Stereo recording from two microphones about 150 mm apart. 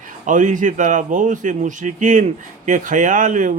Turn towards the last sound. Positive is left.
turn(degrees=-60)  # may be behind; listen again after turning